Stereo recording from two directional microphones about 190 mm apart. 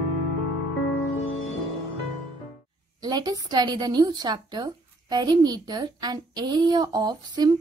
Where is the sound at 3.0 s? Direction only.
20° right (ahead or behind).